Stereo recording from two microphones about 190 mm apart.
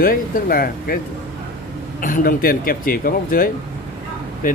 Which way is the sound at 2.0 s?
50° left (ahead or behind).